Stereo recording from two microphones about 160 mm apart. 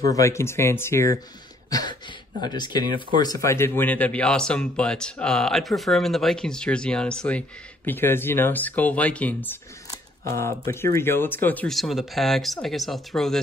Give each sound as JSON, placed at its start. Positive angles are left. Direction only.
{"t": 0.1, "sound": "speech", "side_deg": 20}
{"t": 1.7, "sound": "a sound", "side_deg": 25}
{"t": 2.4, "sound": "speech", "side_deg": 25}